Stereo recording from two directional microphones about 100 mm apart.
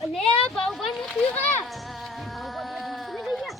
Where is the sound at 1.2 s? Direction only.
15° left (ahead or behind).